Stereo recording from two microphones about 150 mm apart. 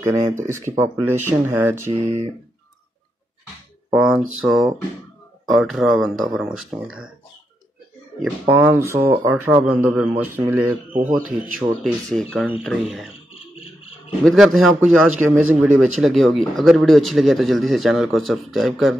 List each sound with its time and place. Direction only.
0.0 s speech: 20° right (ahead or behind)
3.9 s speech: 5° right (ahead or behind)
8.5 s speech: 15° right (ahead or behind)
11.2 s speech: 65° right (ahead or behind)
11.8 s speech: 5° left (ahead or behind)
14.2 s speech: centre (ahead or behind)
15.0 s speech: 10° right (ahead or behind)